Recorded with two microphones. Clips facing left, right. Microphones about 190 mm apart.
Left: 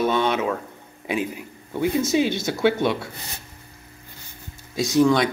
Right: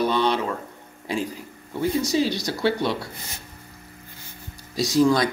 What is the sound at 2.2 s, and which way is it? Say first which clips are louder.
Speech: left 2 dB; 55° left (ahead or behind).